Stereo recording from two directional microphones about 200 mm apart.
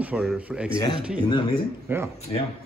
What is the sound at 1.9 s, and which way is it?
Speech, 10° right (ahead or behind).